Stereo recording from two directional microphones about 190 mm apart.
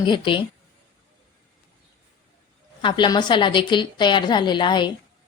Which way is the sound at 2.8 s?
25° left (ahead or behind).